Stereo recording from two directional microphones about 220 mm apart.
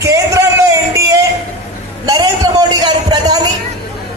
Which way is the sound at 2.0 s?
20° right (ahead or behind).